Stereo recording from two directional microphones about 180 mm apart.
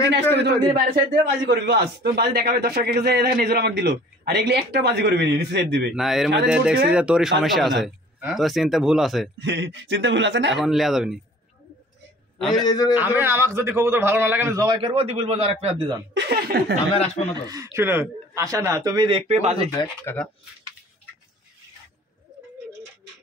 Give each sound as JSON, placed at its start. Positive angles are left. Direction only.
{"t": 0.8, "sound": "a man's voice", "side_deg": -65}
{"t": 5.9, "sound": "speech", "side_deg": 0}
{"t": 9.4, "sound": "speech", "side_deg": -80}
{"t": 10.5, "sound": "speech", "side_deg": 0}
{"t": 12.4, "sound": "a man's voice", "side_deg": 0}
{"t": 12.6, "sound": "a man's voice", "side_deg": 25}
{"t": 12.9, "sound": "a man's voice", "side_deg": -10}
{"t": 16.2, "sound": "a man's voice", "side_deg": -60}
{"t": 16.9, "sound": "speech", "side_deg": 35}
{"t": 17.7, "sound": "a man's voice", "side_deg": -10}
{"t": 20.1, "sound": "speech", "side_deg": 15}